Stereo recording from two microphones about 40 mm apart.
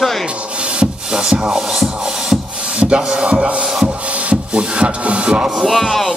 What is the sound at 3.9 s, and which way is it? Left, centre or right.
Wood, right.